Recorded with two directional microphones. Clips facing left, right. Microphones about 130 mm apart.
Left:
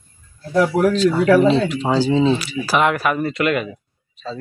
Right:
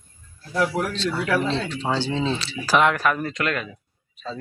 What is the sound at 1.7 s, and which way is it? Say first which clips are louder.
Speech: left 7 dB; 10° left (ahead or behind).